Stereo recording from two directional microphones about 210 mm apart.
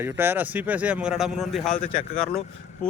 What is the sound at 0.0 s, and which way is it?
Speech, 10° right (ahead or behind).